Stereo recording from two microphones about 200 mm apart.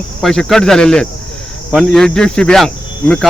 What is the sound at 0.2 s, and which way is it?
Speech, centre (ahead or behind).